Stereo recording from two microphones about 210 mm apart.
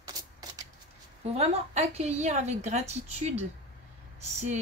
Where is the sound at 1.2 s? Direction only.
30° right (ahead or behind).